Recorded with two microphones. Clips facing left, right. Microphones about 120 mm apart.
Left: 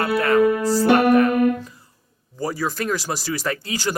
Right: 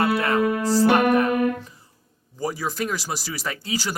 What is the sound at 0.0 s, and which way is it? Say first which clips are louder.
Speech: left 3 dB; 20° right (ahead or behind).